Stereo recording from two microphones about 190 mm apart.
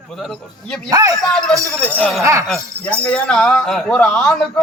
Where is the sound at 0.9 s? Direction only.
20° right (ahead or behind).